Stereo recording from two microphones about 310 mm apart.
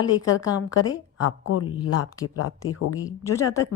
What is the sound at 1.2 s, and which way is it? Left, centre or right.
Speech, left.